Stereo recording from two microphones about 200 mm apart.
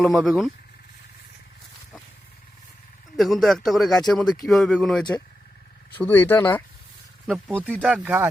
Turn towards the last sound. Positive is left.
turn(degrees=0)  # may be behind; listen again after turning